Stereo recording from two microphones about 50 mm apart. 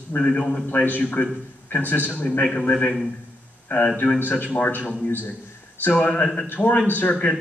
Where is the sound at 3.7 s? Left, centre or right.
Left.